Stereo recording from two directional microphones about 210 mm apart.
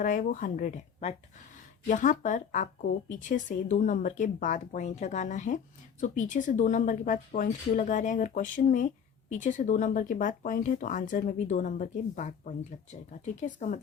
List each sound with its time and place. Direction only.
0.0 s speech: 40° left (ahead or behind)